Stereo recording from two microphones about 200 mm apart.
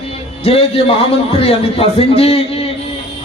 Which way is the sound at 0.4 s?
30° left (ahead or behind).